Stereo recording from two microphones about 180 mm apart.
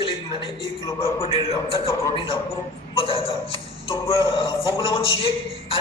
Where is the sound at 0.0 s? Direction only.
30° left (ahead or behind).